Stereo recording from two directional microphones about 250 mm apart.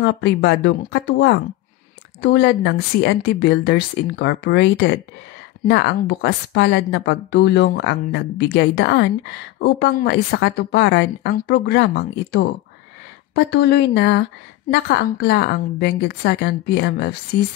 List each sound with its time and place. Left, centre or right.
0.0 s a woman's voice: left